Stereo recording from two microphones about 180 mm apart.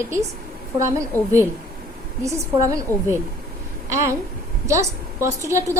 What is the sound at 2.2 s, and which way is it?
Speech, 15° right (ahead or behind).